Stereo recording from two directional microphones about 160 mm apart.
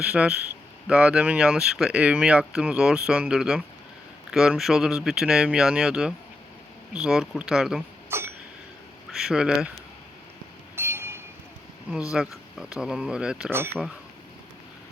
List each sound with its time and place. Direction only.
0.0 s speech: 5° right (ahead or behind)
8.1 s a sound: 15° right (ahead or behind)
9.1 s speech: 5° right (ahead or behind)
10.8 s train: 15° right (ahead or behind)
12.1 s speech: 5° right (ahead or behind)